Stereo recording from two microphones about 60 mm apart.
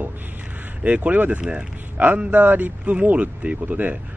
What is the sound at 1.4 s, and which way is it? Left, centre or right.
Speech, centre.